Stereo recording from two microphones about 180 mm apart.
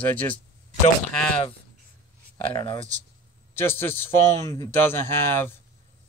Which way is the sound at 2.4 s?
30° left (ahead or behind).